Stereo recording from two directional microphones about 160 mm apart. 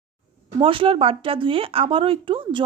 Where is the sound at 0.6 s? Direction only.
35° right (ahead or behind).